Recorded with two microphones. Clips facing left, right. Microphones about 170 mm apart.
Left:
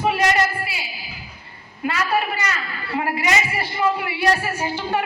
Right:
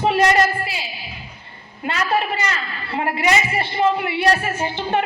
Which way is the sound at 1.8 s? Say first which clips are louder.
Right 1 dB; 25° right (ahead or behind).